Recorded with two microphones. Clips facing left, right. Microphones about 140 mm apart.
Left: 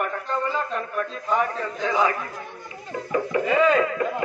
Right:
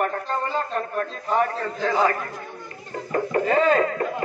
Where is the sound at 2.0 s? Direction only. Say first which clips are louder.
Right 2 dB; 50° right (ahead or behind).